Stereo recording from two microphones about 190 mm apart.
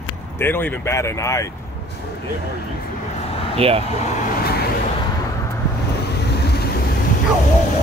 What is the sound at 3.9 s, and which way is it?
Vehicle, 40° left (ahead or behind).